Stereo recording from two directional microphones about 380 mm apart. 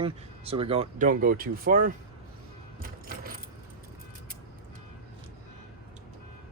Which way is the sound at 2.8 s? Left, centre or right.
Right.